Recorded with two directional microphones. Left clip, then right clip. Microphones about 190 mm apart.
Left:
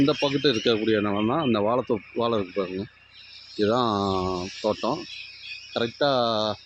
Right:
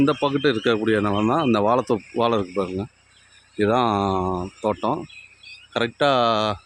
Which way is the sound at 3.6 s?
35° right (ahead or behind).